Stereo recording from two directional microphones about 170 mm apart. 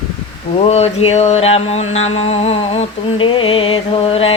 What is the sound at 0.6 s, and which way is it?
Mantra, 35° left (ahead or behind).